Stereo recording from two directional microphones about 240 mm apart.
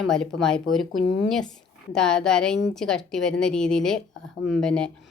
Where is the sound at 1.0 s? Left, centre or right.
Left.